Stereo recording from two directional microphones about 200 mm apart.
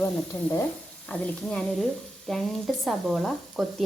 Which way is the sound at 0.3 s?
20° left (ahead or behind).